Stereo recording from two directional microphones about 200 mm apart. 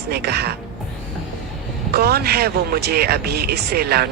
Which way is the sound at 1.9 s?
50° right (ahead or behind).